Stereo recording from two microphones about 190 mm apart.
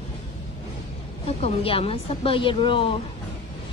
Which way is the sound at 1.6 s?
30° left (ahead or behind).